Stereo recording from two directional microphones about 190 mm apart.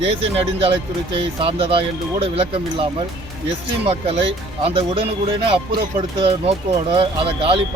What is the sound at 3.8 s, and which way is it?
Speech, 30° right (ahead or behind).